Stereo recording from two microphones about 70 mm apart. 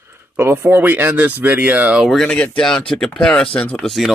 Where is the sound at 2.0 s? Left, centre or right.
Centre.